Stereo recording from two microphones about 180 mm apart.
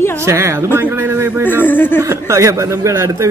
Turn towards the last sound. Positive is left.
turn(degrees=-15)  # may be behind; listen again after turning